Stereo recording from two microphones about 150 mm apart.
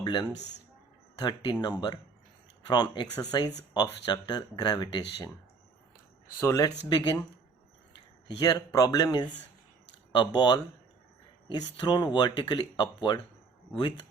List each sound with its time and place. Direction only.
0.0 s speech: 30° left (ahead or behind)
6.4 s speech: 20° left (ahead or behind)
8.4 s speech: 25° left (ahead or behind)
10.1 s speech: 30° left (ahead or behind)